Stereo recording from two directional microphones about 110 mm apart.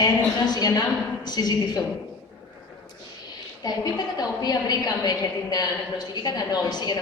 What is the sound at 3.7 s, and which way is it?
A woman's voice, 40° left (ahead or behind).